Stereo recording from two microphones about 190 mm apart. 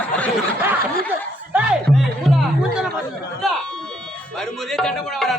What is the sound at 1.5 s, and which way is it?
Speech, 5° right (ahead or behind).